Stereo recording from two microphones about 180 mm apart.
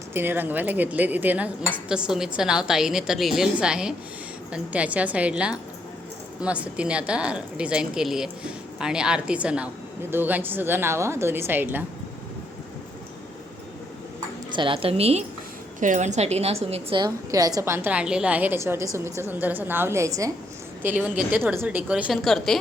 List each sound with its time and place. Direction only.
0.1 s speech: 10° right (ahead or behind)
14.5 s a woman's voice: 30° right (ahead or behind); by 22.5 s centre (ahead or behind)